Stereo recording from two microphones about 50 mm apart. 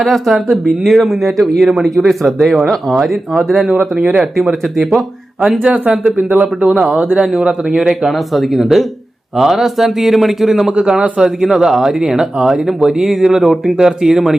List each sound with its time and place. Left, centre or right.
0.0 s a man's voice: centre
6.1 s speech: right
7.3 s a man's voice: centre
10.7 s speech: centre